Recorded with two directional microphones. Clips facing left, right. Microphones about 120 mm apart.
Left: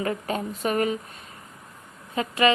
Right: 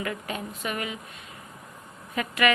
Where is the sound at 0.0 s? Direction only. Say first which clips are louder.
Left 5 dB; 35° left (ahead or behind).